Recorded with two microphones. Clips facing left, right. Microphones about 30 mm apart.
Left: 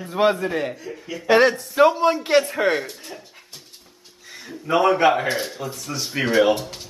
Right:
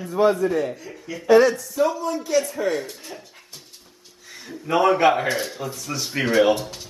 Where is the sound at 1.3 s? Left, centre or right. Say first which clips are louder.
Right 1 dB; left.